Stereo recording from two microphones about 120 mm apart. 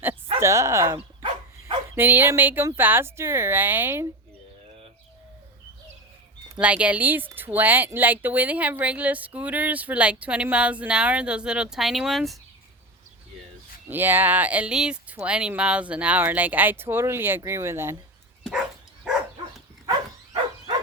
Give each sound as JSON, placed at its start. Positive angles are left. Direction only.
{"t": 0.3, "sound": "speech", "side_deg": -25}
{"t": 6.6, "sound": "speech", "side_deg": -10}
{"t": 13.9, "sound": "speech", "side_deg": -15}